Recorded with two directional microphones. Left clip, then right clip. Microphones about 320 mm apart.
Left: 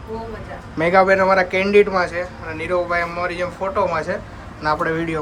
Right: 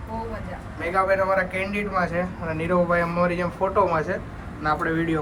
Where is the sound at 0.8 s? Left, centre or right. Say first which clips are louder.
Left 7 dB; centre.